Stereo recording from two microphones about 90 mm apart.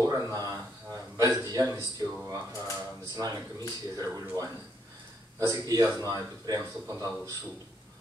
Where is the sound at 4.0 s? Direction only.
40° right (ahead or behind).